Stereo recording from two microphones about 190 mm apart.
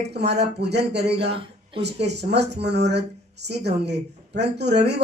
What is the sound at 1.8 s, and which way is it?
A man's voice, 60° right (ahead or behind).